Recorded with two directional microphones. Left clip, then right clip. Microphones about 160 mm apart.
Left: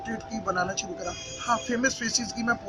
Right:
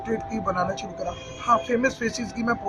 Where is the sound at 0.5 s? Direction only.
20° right (ahead or behind).